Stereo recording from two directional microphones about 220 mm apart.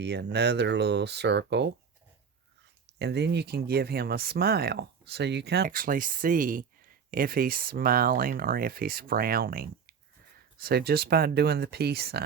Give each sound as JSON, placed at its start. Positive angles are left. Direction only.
{"t": 0.0, "sound": "speech", "side_deg": -50}
{"t": 3.0, "sound": "speech", "side_deg": -50}